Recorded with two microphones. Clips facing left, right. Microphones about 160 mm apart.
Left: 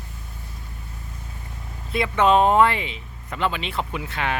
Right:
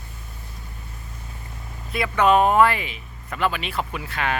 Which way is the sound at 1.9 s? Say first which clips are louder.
Even; 25° left (ahead or behind).